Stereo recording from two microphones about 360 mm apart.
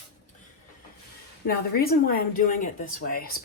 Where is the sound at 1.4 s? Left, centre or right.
Left.